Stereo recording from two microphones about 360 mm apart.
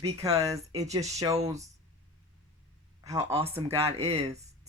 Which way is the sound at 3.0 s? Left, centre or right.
Centre.